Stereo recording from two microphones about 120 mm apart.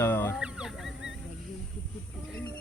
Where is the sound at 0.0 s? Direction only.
20° left (ahead or behind).